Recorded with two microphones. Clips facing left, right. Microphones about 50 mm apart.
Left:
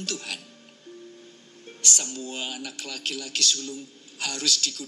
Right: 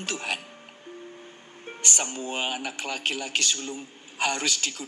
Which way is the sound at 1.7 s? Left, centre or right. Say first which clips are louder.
Right 1 dB; right.